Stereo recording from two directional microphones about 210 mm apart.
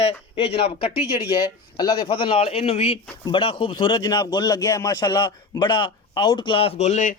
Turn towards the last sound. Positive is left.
turn(degrees=35)  # may be behind; listen again after turning